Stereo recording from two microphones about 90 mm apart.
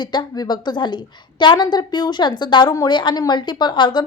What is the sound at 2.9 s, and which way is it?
Speech, 60° left (ahead or behind).